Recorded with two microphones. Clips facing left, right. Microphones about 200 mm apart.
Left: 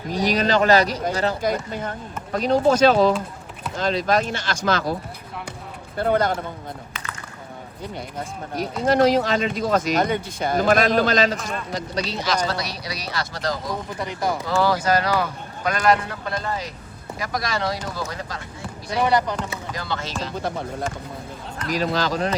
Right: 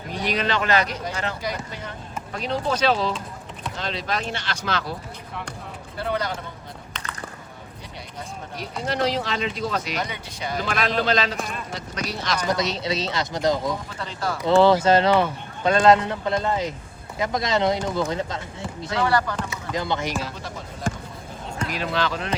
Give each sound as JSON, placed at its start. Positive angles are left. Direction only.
{"t": 0.1, "sound": "speech", "side_deg": 40}
{"t": 1.4, "sound": "speech", "side_deg": 50}
{"t": 6.0, "sound": "speech", "side_deg": 50}
{"t": 8.5, "sound": "speech", "side_deg": 45}
{"t": 12.5, "sound": "speech", "side_deg": -20}
{"t": 14.0, "sound": "speech", "side_deg": 15}
{"t": 14.6, "sound": "speech", "side_deg": -25}
{"t": 18.9, "sound": "speech", "side_deg": 20}
{"t": 19.7, "sound": "speech", "side_deg": -20}
{"t": 20.4, "sound": "speech", "side_deg": 55}
{"t": 21.7, "sound": "speech", "side_deg": 40}